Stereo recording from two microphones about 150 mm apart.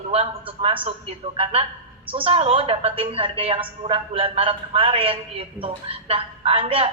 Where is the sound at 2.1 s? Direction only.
40° right (ahead or behind).